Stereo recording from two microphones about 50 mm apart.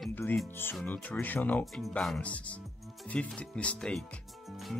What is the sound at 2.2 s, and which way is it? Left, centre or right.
Speech, left.